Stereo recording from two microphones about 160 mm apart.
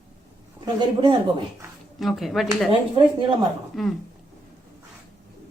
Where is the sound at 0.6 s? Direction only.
25° right (ahead or behind).